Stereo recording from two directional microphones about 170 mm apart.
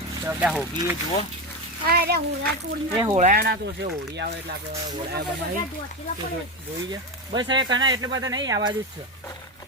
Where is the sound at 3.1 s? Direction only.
45° right (ahead or behind).